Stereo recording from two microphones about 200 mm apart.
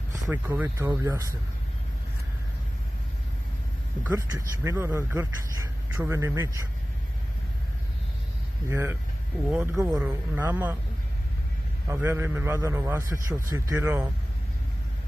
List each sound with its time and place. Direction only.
0.1 s speech: 10° right (ahead or behind)
4.0 s speech: 15° right (ahead or behind)
8.6 s speech: 15° right (ahead or behind)
11.9 s speech: 15° right (ahead or behind)